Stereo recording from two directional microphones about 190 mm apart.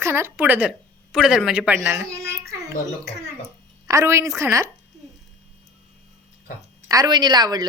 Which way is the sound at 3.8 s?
15° right (ahead or behind).